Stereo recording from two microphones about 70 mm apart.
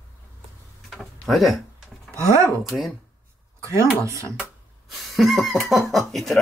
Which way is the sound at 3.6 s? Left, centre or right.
Right.